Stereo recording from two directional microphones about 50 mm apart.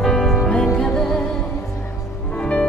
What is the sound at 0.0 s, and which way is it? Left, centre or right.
Music, centre.